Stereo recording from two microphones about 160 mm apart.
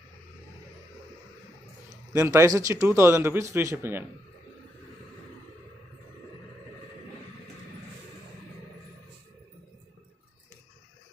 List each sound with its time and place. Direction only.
1.9 s speech: 15° right (ahead or behind)